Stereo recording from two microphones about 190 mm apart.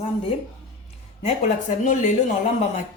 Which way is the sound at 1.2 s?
40° left (ahead or behind).